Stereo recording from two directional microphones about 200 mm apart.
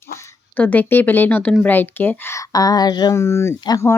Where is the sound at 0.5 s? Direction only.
10° left (ahead or behind).